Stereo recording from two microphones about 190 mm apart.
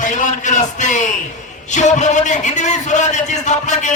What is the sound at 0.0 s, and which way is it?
A man's voice, 40° left (ahead or behind).